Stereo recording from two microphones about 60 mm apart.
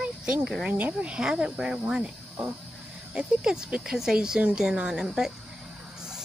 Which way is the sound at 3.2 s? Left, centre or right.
Centre.